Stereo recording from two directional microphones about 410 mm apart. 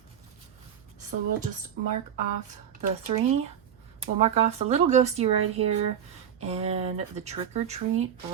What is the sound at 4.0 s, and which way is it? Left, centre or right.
Speech, centre.